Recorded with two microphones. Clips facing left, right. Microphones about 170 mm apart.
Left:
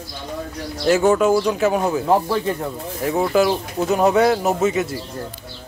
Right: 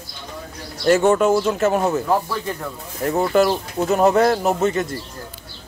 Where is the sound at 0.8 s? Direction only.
Centre (ahead or behind).